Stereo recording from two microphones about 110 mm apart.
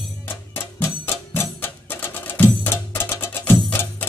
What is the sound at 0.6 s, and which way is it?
Music, 20° left (ahead or behind).